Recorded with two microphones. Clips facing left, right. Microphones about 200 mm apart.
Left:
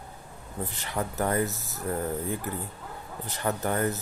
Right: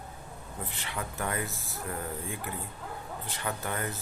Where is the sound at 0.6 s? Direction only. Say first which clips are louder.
Left 6 dB; 40° left (ahead or behind).